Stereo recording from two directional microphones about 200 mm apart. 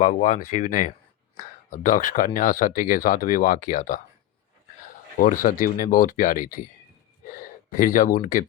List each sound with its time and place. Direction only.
0.0 s speech: 40° left (ahead or behind)
5.2 s speech: 40° left (ahead or behind)